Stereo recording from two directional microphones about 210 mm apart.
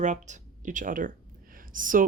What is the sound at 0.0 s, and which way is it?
Speech, 35° right (ahead or behind).